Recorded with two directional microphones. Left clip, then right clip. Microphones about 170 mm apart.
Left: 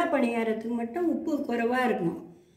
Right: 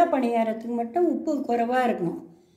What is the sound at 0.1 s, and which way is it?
Speech, 45° right (ahead or behind).